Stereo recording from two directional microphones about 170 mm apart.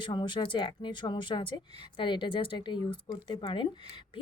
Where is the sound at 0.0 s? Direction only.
30° left (ahead or behind).